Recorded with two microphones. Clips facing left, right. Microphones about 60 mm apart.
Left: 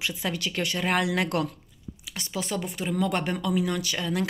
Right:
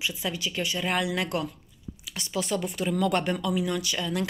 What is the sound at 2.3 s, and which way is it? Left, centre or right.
Speech, left.